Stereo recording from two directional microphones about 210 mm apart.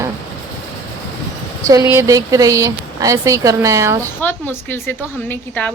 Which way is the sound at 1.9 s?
15° right (ahead or behind).